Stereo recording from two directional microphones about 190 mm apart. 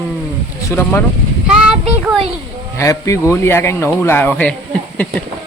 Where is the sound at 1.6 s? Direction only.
Centre (ahead or behind).